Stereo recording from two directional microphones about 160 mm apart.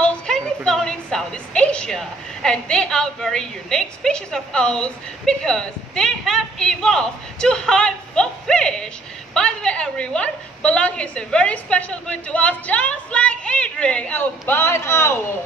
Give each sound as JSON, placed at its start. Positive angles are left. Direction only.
{"t": 0.0, "sound": "a woman's voice", "side_deg": 5}